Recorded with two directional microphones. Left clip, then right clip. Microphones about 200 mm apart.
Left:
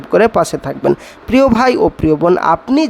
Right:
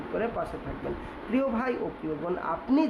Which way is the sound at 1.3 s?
50° left (ahead or behind).